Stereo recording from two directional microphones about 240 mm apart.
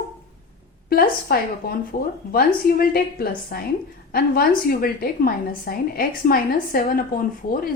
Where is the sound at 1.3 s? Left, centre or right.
Left.